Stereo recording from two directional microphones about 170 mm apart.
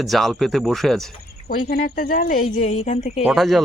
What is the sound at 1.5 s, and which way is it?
A woman's voice, 60° left (ahead or behind).